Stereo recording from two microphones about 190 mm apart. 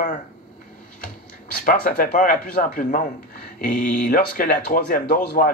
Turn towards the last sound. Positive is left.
turn(degrees=50)  # may be behind; listen again after turning